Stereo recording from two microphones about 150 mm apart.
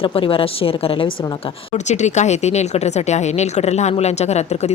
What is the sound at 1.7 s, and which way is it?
Speech, 50° left (ahead or behind).